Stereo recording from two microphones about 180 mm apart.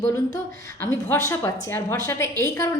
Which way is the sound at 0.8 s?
15° left (ahead or behind).